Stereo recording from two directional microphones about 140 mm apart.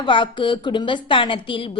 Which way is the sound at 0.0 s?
35° left (ahead or behind).